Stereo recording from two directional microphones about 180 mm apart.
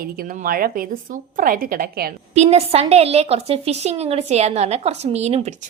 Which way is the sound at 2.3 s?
35° right (ahead or behind).